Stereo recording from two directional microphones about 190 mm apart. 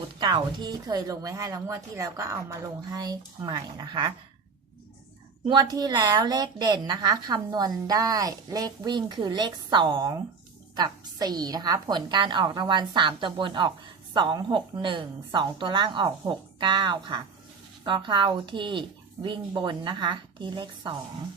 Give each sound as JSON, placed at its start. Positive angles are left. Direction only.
{"t": 0.2, "sound": "a woman's voice", "side_deg": -25}
{"t": 5.5, "sound": "a woman's voice", "side_deg": -20}